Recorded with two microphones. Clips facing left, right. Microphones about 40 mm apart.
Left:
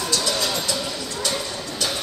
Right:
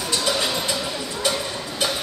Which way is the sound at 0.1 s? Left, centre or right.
Right.